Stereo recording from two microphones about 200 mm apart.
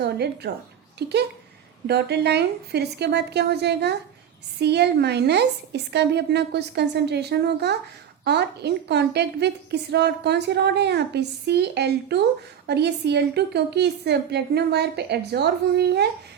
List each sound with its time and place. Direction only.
0.0 s a woman's voice: 55° right (ahead or behind)